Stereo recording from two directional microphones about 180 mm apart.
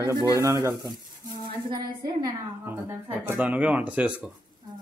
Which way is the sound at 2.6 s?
10° right (ahead or behind).